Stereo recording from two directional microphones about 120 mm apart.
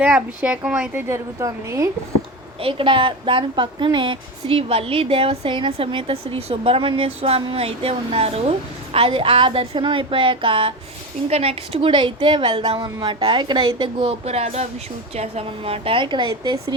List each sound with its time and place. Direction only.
0.0 s speech: 10° right (ahead or behind)
1.0 s a woman's voice: 25° right (ahead or behind)
2.6 s a woman's voice: 50° right (ahead or behind)